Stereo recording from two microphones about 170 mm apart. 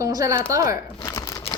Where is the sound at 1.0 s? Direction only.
15° left (ahead or behind).